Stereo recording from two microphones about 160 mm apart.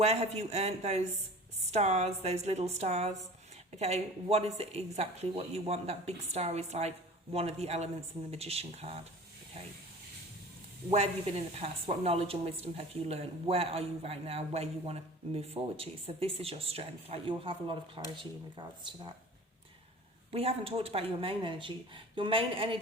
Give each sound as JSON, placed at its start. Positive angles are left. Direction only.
{"t": 0.0, "sound": "a woman's voice", "side_deg": -40}
{"t": 10.9, "sound": "a woman's voice", "side_deg": -40}
{"t": 20.3, "sound": "a woman's voice", "side_deg": -40}